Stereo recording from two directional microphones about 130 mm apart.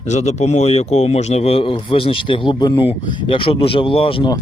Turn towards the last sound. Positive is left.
turn(degrees=45)  # may be behind; listen again after turning